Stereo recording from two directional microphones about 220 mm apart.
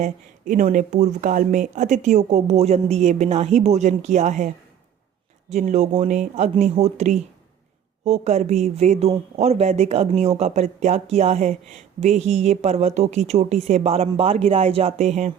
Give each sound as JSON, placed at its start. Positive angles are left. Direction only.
{"t": 0.0, "sound": "speech", "side_deg": -35}